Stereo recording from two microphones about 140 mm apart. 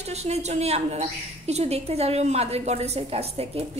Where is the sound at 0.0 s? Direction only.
50° right (ahead or behind).